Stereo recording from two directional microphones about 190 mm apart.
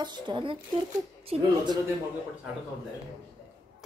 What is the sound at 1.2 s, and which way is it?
Speech, 30° right (ahead or behind).